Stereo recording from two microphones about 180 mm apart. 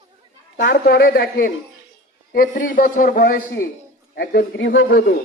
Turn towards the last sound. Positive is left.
turn(degrees=65)  # may be behind; listen again after turning